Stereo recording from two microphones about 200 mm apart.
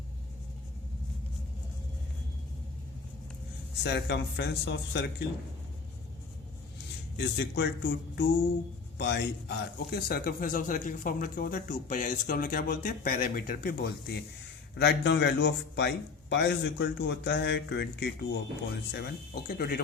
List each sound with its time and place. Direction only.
3.8 s speech: 55° left (ahead or behind)
7.2 s a man's voice: 60° left (ahead or behind)